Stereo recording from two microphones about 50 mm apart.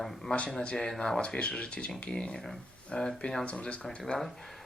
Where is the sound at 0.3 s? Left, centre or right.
Centre.